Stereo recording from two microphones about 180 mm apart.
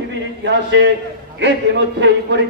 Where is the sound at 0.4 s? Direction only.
80° right.